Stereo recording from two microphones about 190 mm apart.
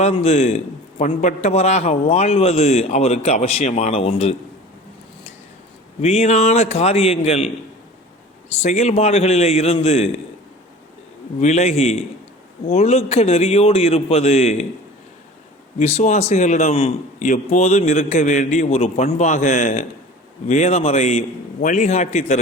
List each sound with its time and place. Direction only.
0.0 s a man's voice: 35° left (ahead or behind)
6.0 s a man's voice: 30° left (ahead or behind)
11.3 s a man's voice: 35° left (ahead or behind)
15.8 s a man's voice: 35° left (ahead or behind)